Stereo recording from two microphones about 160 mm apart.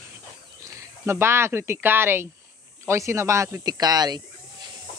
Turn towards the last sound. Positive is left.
turn(degrees=-25)  # may be behind; listen again after turning